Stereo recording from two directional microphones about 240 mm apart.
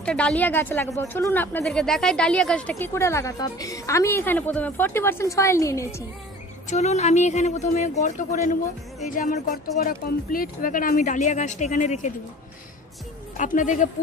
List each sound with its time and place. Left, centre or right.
0.0 s a woman's voice: centre
6.7 s speech: left
13.4 s speech: left